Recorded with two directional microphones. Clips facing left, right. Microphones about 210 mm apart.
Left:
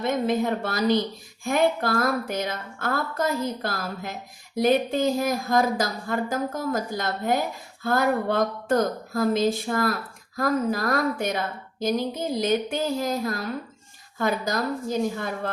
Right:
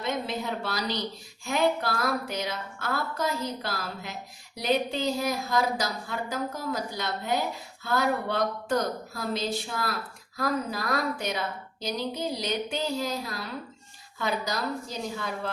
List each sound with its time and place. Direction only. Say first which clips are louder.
0.0 s a woman's voice: left 7 dB; 50° left (ahead or behind)